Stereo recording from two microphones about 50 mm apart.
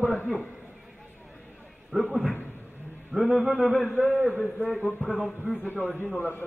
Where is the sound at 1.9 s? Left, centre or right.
Right.